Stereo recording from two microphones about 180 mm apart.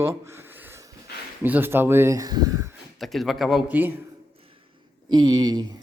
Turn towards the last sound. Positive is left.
turn(degrees=-20)  # may be behind; listen again after turning